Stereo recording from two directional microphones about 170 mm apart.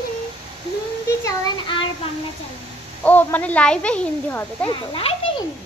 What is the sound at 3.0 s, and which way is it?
Speech, 10° left (ahead or behind).